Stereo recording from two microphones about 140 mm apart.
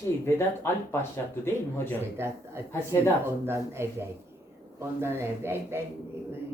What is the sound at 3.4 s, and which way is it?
Speech, 20° right (ahead or behind).